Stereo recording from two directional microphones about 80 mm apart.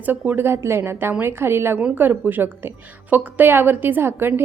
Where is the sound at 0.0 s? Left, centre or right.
Right.